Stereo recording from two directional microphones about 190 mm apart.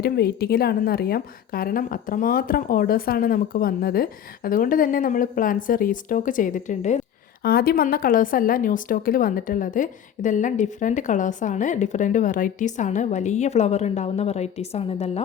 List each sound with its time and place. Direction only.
0.0 s a woman's voice: 55° left (ahead or behind); by 7.0 s 40° left (ahead or behind)
7.4 s speech: 55° left (ahead or behind); by 15.2 s 35° left (ahead or behind)